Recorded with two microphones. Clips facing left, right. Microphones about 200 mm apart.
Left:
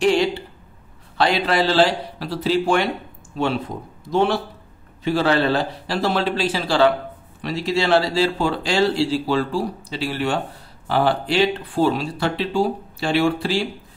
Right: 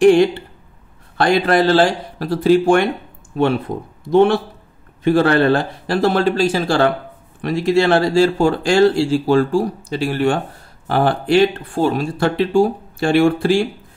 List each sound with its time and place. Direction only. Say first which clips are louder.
0.0 s speech: right 7 dB; 50° right (ahead or behind)